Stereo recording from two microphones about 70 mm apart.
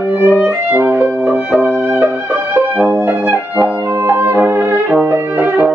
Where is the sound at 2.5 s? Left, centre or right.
Right.